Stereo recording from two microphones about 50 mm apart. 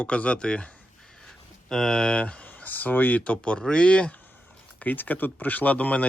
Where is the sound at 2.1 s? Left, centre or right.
Left.